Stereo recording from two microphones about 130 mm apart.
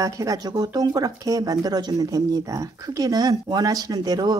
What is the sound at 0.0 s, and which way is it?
Speech, 25° right (ahead or behind).